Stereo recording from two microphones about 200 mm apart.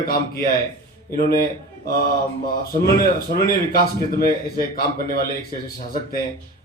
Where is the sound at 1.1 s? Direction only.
50° left (ahead or behind).